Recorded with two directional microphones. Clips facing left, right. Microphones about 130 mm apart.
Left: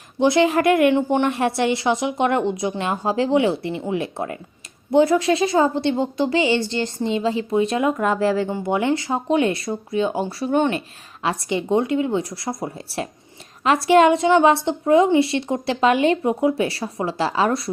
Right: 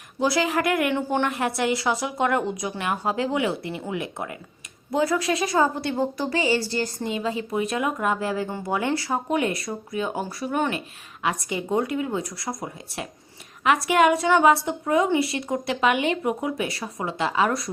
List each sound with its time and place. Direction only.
0.2 s a woman's voice: 25° left (ahead or behind)